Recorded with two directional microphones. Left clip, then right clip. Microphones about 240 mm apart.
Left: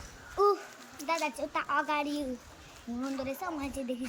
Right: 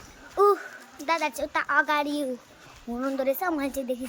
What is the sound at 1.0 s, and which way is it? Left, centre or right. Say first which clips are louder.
A child's voice: right 6 dB; centre.